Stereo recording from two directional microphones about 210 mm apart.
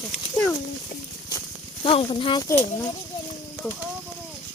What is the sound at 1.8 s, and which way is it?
Speech, 25° left (ahead or behind).